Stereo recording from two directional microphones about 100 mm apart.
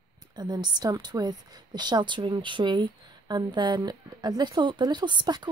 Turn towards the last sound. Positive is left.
turn(degrees=-50)  # may be behind; listen again after turning